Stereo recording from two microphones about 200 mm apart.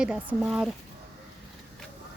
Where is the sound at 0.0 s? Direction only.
5° right (ahead or behind).